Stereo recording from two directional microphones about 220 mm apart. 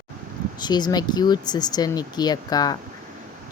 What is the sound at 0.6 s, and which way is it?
Speech, 20° left (ahead or behind).